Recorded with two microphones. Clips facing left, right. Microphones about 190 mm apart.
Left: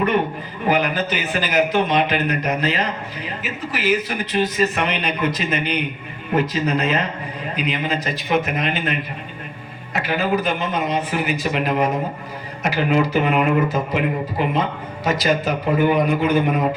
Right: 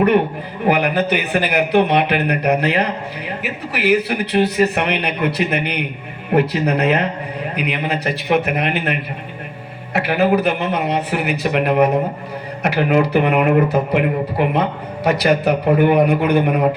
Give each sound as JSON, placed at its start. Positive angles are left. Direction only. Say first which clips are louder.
{"t": 0.6, "sound": "speech", "louder": "right 3 dB", "side_deg": -60}